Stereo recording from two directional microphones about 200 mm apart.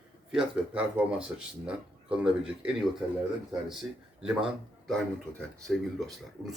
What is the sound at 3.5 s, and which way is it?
Speech, 5° right (ahead or behind).